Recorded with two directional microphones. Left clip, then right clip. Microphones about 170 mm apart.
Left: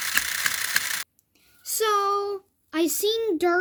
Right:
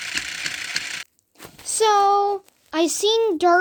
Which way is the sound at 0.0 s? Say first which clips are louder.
Left 2 dB; 25° left (ahead or behind).